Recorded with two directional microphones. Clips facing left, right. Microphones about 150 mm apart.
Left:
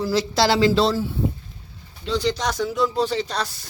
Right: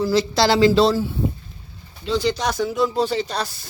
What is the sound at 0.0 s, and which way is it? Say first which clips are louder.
Speech: right 2 dB; 5° left (ahead or behind).